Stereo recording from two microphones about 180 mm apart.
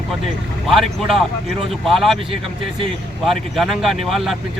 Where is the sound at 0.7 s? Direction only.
Centre (ahead or behind).